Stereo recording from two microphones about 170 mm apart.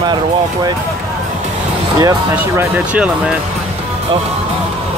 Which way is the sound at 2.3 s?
10° right (ahead or behind).